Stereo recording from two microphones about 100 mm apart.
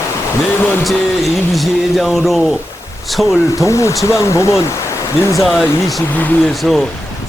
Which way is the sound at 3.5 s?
30° left (ahead or behind).